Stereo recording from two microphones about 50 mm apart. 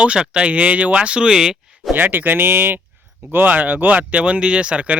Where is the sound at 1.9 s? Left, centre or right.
Right.